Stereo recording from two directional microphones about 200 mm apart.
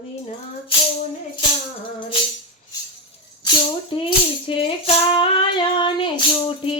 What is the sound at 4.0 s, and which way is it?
Music, 25° left (ahead or behind).